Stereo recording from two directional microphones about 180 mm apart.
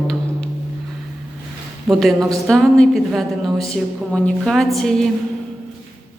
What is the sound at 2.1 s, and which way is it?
Speech, 20° right (ahead or behind).